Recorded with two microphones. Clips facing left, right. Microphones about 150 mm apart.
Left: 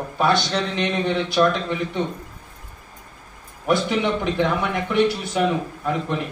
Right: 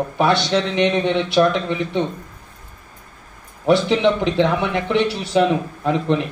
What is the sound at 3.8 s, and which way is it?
Speech, 85° right.